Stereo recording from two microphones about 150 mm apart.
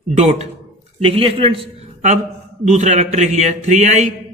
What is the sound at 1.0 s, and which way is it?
A man's voice, 40° right (ahead or behind).